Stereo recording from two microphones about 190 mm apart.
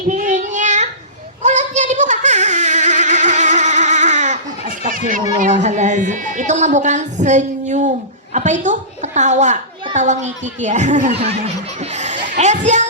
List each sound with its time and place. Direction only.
0.1 s child singing: 40° right (ahead or behind)
1.4 s a sound: 40° right (ahead or behind)
5.4 s a woman's voice: 40° right (ahead or behind)